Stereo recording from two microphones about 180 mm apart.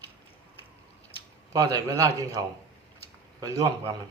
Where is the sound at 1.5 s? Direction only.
20° right (ahead or behind).